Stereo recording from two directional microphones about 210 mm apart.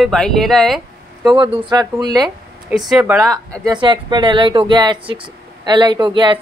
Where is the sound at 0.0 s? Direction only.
Centre (ahead or behind).